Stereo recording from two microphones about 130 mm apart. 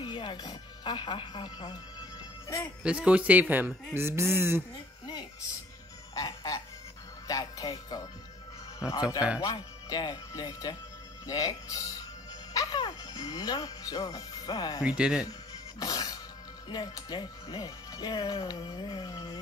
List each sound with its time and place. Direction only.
0.0 s speech: 35° left (ahead or behind)
2.8 s speech: 10° right (ahead or behind)
6.1 s music: 30° left (ahead or behind)
7.2 s speech: 30° left (ahead or behind)
8.8 s speech: 10° right (ahead or behind)
9.4 s speech: 30° left (ahead or behind)
14.8 s speech: 5° right (ahead or behind)
15.8 s music: 30° left (ahead or behind)
16.6 s speech: 30° left (ahead or behind)